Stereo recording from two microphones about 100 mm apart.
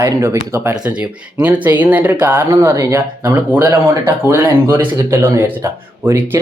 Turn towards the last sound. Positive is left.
turn(degrees=-25)  # may be behind; listen again after turning